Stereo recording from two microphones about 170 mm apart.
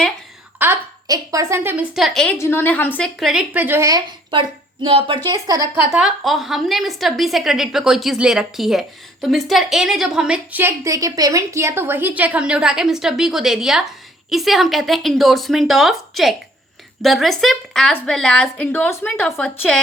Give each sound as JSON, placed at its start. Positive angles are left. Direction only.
{"t": 0.6, "sound": "a woman's voice", "side_deg": -15}
{"t": 2.4, "sound": "a woman's voice", "side_deg": 15}
{"t": 3.2, "sound": "a woman's voice", "side_deg": -5}
{"t": 5.9, "sound": "a woman's voice", "side_deg": -5}